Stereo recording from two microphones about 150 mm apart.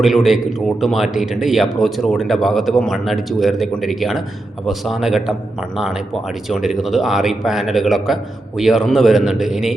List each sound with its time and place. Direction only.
0.0 s speech: centre (ahead or behind)
6.5 s speech: centre (ahead or behind)